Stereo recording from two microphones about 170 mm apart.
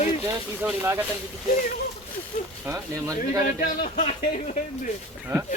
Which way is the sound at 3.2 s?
50° left (ahead or behind).